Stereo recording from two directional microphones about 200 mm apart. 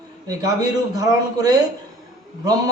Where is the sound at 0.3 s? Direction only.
20° right (ahead or behind).